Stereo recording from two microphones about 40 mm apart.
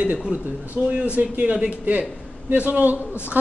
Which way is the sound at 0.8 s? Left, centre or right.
Right.